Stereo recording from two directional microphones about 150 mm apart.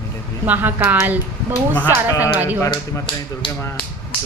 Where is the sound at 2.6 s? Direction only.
30° left (ahead or behind).